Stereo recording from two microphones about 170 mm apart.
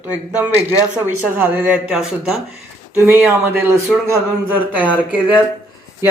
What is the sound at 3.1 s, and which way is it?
A man's voice, 15° right (ahead or behind).